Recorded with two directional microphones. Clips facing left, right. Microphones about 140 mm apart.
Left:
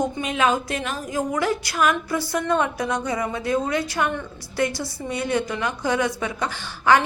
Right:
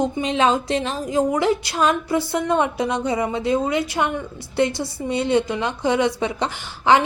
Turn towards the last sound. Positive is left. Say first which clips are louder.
# right 2 dB
turn(degrees=-25)  # may be behind; listen again after turning